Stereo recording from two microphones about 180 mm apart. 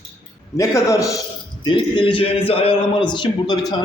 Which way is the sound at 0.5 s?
15° left (ahead or behind).